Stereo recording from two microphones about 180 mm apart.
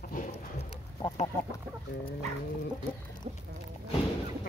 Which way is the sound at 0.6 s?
30° left (ahead or behind).